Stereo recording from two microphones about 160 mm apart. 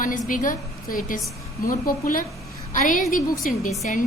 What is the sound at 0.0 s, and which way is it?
A woman's voice, 55° left (ahead or behind).